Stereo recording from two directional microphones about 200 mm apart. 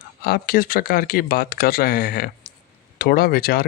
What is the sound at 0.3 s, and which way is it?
Speech, 50° left (ahead or behind).